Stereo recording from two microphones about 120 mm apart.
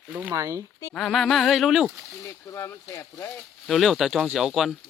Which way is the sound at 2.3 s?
25° left (ahead or behind).